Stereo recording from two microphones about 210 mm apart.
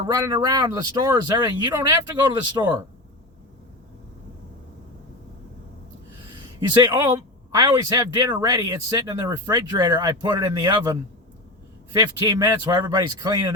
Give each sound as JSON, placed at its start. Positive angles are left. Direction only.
{"t": 0.0, "sound": "speech", "side_deg": -20}
{"t": 6.7, "sound": "speech", "side_deg": -20}
{"t": 11.9, "sound": "speech", "side_deg": -20}